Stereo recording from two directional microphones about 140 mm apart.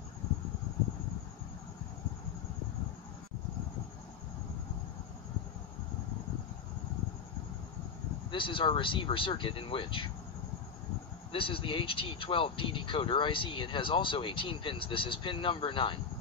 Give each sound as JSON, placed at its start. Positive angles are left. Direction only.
{"t": 8.3, "sound": "speech", "side_deg": 35}
{"t": 11.3, "sound": "speech", "side_deg": 40}